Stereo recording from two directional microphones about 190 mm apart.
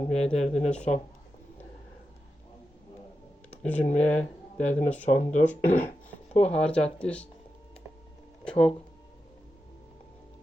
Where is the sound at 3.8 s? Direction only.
40° left (ahead or behind).